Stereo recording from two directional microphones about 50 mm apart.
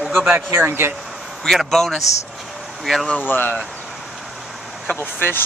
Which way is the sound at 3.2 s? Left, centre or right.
Left.